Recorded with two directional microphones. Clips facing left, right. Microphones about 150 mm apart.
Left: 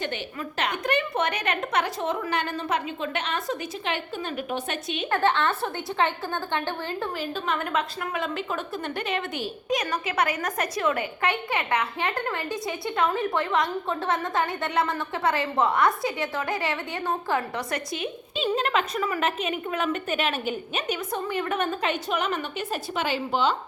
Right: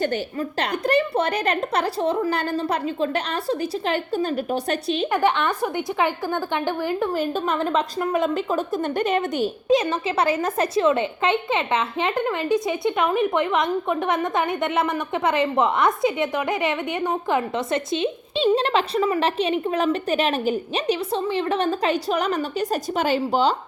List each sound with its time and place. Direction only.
0.0 s a woman's voice: 40° right (ahead or behind)
5.1 s a woman's voice: 15° right (ahead or behind)
7.1 s a woman's voice: 45° right (ahead or behind)
9.6 s a woman's voice: 25° right (ahead or behind)